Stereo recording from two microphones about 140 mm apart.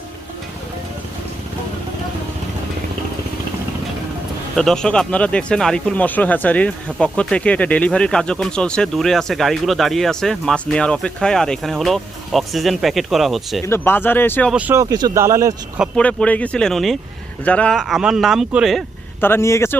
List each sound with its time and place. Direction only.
4.5 s speech: 5° left (ahead or behind)
13.7 s speech: 15° left (ahead or behind)
14.5 s speech: 10° right (ahead or behind)
14.8 s speech: 25° right (ahead or behind)
16.0 s speech: 10° left (ahead or behind)
19.2 s speech: 20° left (ahead or behind)